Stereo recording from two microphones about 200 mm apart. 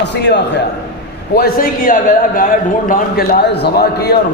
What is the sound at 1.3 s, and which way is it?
A man's voice, 45° left (ahead or behind).